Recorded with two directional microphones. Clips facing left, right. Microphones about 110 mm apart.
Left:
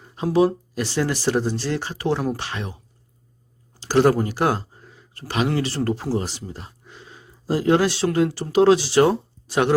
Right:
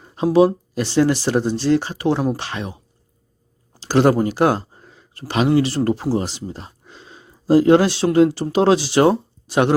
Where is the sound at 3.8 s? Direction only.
25° right (ahead or behind).